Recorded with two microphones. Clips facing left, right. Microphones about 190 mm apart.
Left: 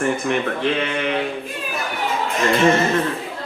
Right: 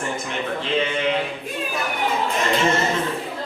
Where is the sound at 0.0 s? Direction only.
60° left (ahead or behind).